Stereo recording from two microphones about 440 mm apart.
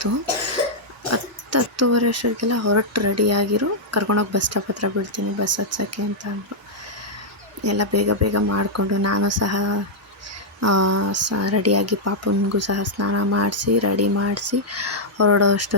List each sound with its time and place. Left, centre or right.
1.1 s speech: right
7.6 s speech: right